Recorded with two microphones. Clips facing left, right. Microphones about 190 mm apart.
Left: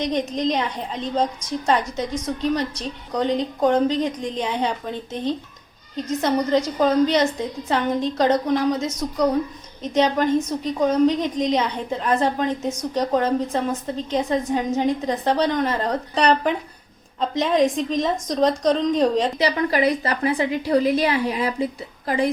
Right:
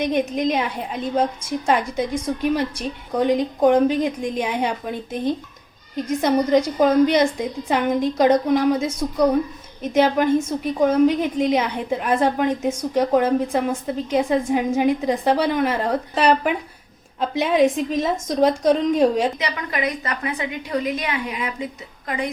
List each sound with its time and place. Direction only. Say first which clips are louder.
0.0 s a woman's voice: right 2 dB; 10° right (ahead or behind)
19.4 s a woman's voice: left 6 dB; 35° left (ahead or behind)